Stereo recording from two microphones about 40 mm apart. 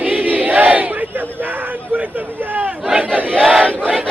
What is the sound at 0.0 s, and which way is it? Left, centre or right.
Battle cry, right.